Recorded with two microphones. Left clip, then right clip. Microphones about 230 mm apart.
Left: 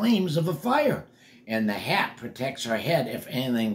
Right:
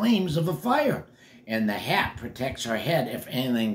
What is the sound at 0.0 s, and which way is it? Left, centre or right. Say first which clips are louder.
Speech: even; centre.